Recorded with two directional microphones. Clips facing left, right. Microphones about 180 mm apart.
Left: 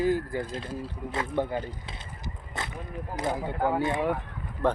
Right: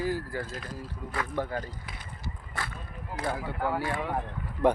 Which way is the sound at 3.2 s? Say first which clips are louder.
Left 3 dB; 20° left (ahead or behind).